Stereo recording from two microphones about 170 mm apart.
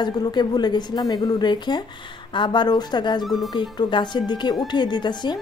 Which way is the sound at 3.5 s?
25° left (ahead or behind).